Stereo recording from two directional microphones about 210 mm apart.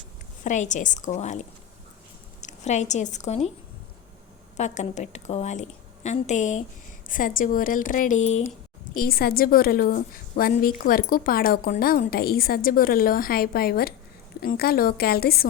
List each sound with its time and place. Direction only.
0.4 s a woman's voice: 35° left (ahead or behind)
4.5 s a woman's voice: 35° left (ahead or behind)
9.0 s a woman's voice: 45° left (ahead or behind)